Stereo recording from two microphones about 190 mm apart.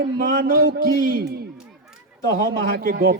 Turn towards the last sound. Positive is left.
turn(degrees=-55)  # may be behind; listen again after turning